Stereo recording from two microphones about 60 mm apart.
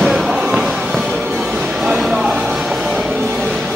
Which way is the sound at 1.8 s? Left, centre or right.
Centre.